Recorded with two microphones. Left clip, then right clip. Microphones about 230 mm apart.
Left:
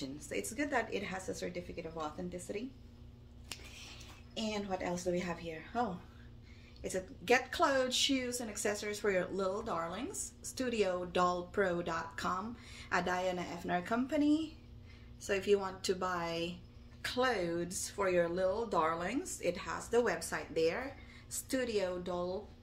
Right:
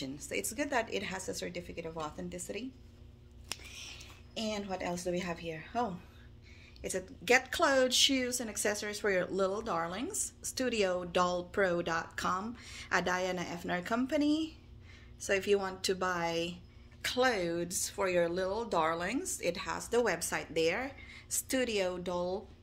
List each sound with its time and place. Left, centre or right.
0.0 s speech: right